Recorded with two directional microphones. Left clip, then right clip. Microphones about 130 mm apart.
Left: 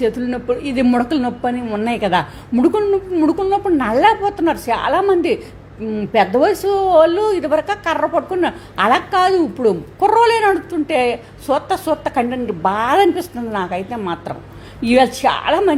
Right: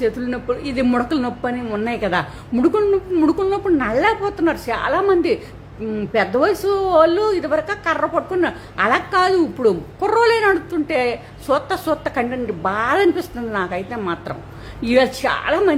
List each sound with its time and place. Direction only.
0.0 s a woman's voice: 15° left (ahead or behind)
3.8 s a woman's voice: 20° left (ahead or behind); by 6.1 s centre (ahead or behind)
6.1 s a woman's voice: 15° left (ahead or behind)